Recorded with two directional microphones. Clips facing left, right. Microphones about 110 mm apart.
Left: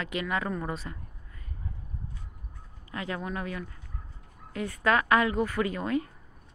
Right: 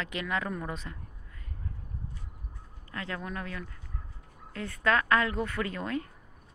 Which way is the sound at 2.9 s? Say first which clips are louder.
Left 3 dB; 15° left (ahead or behind).